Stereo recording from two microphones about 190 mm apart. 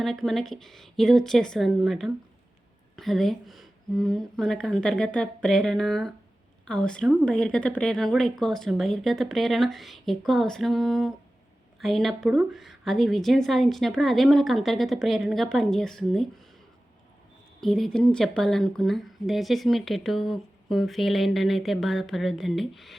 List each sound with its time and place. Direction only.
0.0 s speech: centre (ahead or behind)
17.6 s speech: centre (ahead or behind)